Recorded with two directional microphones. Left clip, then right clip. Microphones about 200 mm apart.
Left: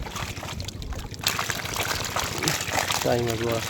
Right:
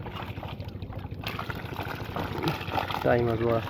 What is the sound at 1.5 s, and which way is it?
Pour, 25° left (ahead or behind).